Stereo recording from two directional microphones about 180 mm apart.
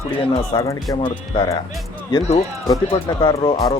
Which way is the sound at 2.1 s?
35° left (ahead or behind).